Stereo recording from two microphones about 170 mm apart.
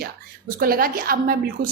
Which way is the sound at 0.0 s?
55° right (ahead or behind).